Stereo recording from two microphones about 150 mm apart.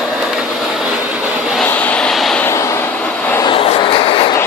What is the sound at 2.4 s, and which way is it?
Vehicle, 20° left (ahead or behind).